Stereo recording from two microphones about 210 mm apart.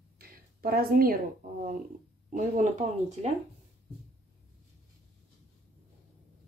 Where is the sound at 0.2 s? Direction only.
45° right (ahead or behind).